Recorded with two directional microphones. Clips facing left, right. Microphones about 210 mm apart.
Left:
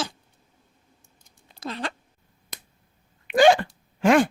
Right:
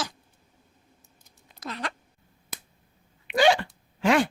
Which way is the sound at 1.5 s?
30° left (ahead or behind).